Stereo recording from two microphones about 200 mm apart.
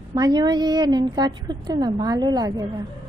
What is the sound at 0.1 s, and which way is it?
A woman's voice, 20° right (ahead or behind).